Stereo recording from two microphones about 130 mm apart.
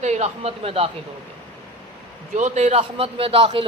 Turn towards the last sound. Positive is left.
turn(degrees=-45)  # may be behind; listen again after turning